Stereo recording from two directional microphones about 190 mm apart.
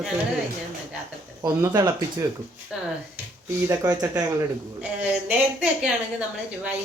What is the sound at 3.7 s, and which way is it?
Speech, 20° right (ahead or behind).